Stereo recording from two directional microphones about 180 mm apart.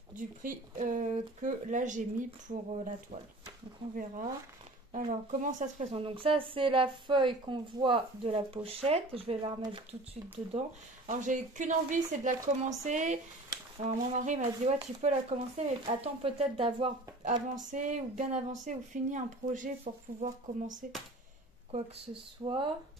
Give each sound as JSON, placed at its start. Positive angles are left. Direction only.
{"t": 0.1, "sound": "speech", "side_deg": -45}
{"t": 4.9, "sound": "a woman's voice", "side_deg": -45}
{"t": 11.1, "sound": "a woman's voice", "side_deg": -45}
{"t": 17.2, "sound": "speech", "side_deg": -45}
{"t": 22.4, "sound": "speech", "side_deg": -25}